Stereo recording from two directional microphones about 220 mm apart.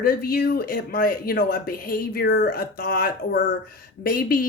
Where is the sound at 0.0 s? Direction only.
40° left (ahead or behind).